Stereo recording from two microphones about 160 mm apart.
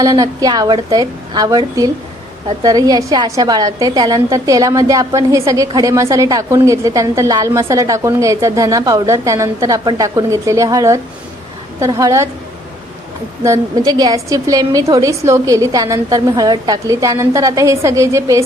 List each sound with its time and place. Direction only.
0.0 s a woman's voice: 25° right (ahead or behind)
13.4 s a woman's voice: 20° right (ahead or behind)